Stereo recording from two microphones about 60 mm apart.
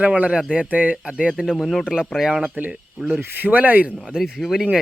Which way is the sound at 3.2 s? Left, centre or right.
Right.